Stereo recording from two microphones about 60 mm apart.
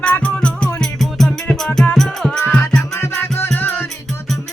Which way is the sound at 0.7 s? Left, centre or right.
Centre.